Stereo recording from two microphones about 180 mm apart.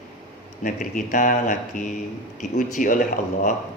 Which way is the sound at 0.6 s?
45° left (ahead or behind).